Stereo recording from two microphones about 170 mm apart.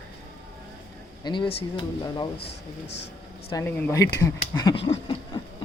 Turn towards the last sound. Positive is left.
turn(degrees=30)  # may be behind; listen again after turning